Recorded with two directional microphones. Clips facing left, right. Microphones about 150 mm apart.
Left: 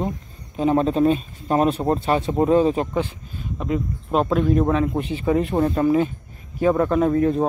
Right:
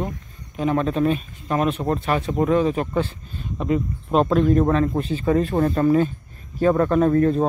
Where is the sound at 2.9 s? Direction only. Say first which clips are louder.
Right 1 dB; 15° left (ahead or behind).